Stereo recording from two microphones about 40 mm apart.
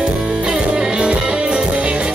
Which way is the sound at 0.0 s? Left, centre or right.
Right.